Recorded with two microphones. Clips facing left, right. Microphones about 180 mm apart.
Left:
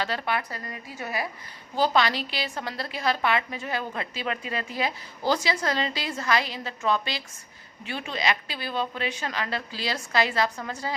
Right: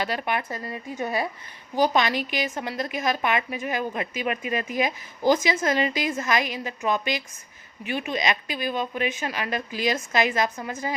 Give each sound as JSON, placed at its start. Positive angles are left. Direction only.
{"t": 0.0, "sound": "a woman's voice", "side_deg": -15}
{"t": 1.7, "sound": "a woman's voice", "side_deg": -15}